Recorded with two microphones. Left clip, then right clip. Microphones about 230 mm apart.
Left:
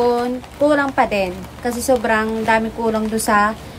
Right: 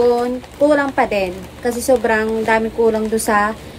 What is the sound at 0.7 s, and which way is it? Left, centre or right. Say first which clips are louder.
A woman's voice: right 1 dB; centre.